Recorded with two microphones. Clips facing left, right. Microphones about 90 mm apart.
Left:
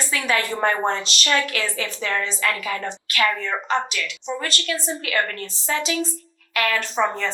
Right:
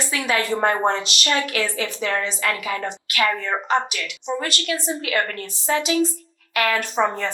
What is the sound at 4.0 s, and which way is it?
Speech, 40° right (ahead or behind).